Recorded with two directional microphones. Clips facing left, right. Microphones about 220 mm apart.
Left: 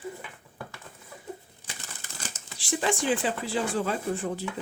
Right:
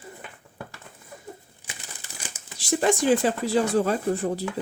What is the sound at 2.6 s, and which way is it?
Speech, 40° right (ahead or behind).